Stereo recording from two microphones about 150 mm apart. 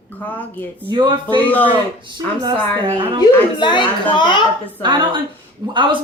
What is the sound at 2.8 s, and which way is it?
Speech, 35° right (ahead or behind).